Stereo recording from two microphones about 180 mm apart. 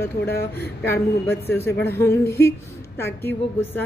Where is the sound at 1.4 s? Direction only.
15° left (ahead or behind).